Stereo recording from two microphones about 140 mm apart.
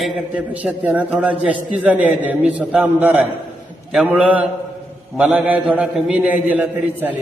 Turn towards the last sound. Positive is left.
turn(degrees=-15)  # may be behind; listen again after turning